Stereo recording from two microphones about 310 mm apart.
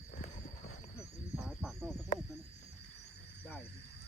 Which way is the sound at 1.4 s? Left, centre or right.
Centre.